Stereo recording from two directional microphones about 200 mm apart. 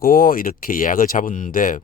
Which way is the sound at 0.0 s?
45° left (ahead or behind).